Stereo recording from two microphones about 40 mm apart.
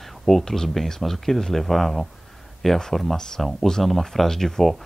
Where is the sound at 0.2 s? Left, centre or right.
Centre.